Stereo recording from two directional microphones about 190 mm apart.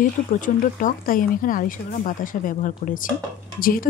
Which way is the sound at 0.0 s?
45° left (ahead or behind).